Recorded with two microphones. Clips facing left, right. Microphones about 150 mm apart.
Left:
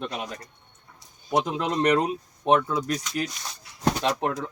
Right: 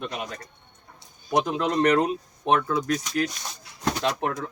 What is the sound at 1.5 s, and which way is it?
Speech, 10° left (ahead or behind).